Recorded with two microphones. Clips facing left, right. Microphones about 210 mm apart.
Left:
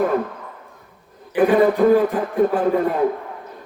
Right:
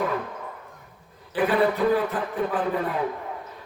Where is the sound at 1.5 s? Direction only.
45° left (ahead or behind).